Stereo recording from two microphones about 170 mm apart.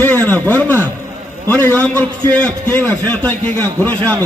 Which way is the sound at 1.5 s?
10° left (ahead or behind).